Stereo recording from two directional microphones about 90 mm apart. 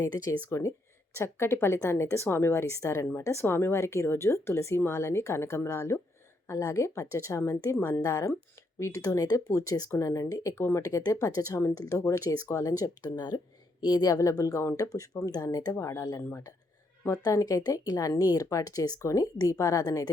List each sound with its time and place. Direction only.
0.0 s speech: 40° left (ahead or behind)
10.8 s speech: 40° left (ahead or behind)